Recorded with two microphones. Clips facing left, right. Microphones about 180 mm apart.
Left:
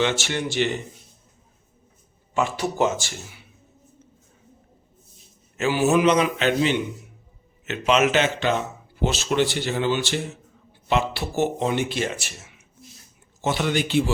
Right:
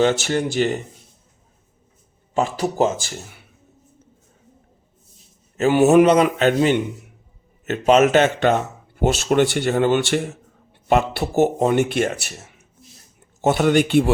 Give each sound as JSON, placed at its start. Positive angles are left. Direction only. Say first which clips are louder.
{"t": 0.0, "sound": "speech", "louder": "right 6 dB", "side_deg": -40}
{"t": 2.3, "sound": "speech", "louder": "right 3 dB", "side_deg": -35}
{"t": 5.5, "sound": "a man's voice", "louder": "right 6 dB", "side_deg": -45}
{"t": 5.8, "sound": "speech", "louder": "right 5 dB", "side_deg": -55}
{"t": 11.9, "sound": "speech", "louder": "right 6 dB", "side_deg": -55}
{"t": 12.4, "sound": "a sound", "louder": "right 4 dB", "side_deg": -40}
{"t": 13.4, "sound": "speech", "louder": "right 7 dB", "side_deg": -45}